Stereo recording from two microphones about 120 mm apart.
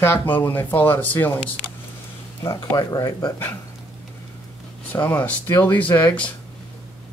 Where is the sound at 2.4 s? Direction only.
35° left (ahead or behind).